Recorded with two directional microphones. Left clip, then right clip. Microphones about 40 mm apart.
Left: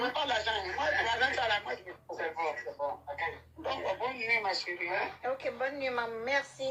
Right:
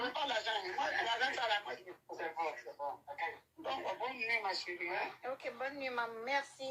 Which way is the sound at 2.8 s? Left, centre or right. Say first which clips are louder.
Left 6 dB; right.